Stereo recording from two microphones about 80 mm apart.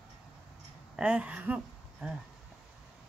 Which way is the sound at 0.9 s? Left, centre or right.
Centre.